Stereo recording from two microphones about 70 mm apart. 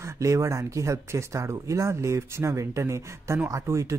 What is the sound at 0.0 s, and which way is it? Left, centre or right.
Speech, right.